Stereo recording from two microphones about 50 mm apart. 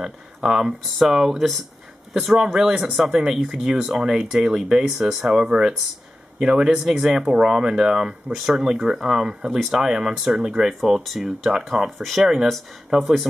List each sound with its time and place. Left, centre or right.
0.0 s speech: centre
9.0 s speech: centre